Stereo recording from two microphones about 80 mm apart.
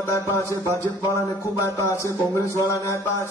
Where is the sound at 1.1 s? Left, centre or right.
Left.